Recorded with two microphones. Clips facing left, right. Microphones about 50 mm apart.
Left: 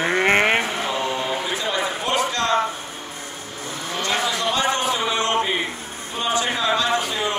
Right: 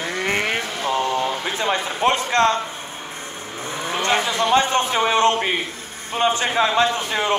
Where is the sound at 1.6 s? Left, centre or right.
Right.